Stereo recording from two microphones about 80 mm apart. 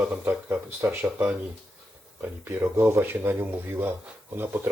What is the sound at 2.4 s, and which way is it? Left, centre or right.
Speech, right.